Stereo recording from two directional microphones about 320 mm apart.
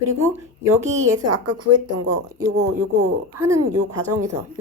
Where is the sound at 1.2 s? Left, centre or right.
Right.